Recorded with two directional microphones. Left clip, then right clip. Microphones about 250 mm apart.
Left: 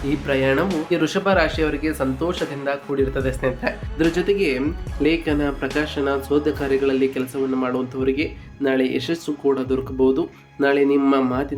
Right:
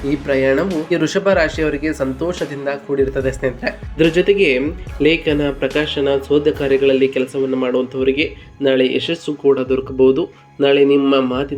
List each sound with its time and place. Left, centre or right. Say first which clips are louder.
0.3 s speech: right 4 dB; centre
8.8 s speech: right 6 dB; left
9.0 s speech: right 6 dB; centre